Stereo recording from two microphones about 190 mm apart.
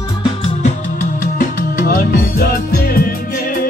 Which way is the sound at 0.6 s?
40° left (ahead or behind).